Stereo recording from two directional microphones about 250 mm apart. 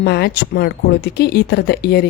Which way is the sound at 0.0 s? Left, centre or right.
Left.